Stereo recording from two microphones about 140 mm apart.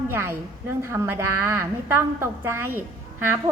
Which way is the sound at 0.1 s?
15° right (ahead or behind).